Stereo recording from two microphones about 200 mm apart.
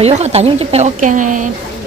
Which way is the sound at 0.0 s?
30° right (ahead or behind).